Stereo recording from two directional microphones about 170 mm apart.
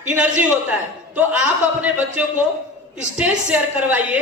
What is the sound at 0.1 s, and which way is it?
A woman's voice, 5° right (ahead or behind).